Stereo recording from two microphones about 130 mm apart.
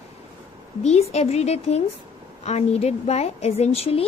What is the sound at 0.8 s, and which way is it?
A woman's voice, 55° left (ahead or behind).